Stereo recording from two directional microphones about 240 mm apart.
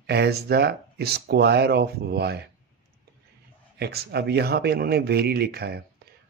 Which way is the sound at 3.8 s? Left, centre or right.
Right.